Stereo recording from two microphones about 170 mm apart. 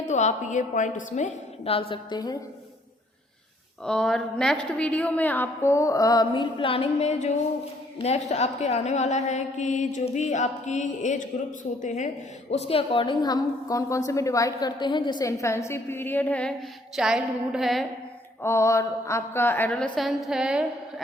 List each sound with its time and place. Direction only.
0.0 s a woman's voice: 45° left (ahead or behind)
1.9 s a woman's voice: 25° left (ahead or behind)
3.8 s a woman's voice: 5° left (ahead or behind)
18.4 s a woman's voice: 15° left (ahead or behind); by 20.7 s 5° right (ahead or behind)